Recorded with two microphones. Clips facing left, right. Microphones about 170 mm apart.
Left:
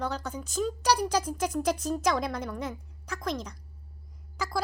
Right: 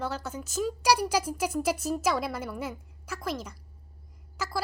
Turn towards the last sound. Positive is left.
turn(degrees=-5)  # may be behind; listen again after turning